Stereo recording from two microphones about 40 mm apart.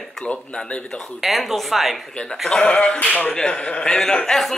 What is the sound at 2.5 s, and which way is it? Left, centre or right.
A man's voice, left.